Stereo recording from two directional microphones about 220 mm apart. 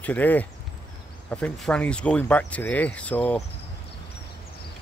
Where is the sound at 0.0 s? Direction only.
5° left (ahead or behind).